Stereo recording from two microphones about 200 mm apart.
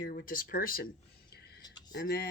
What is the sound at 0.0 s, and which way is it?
Speech, 45° left (ahead or behind).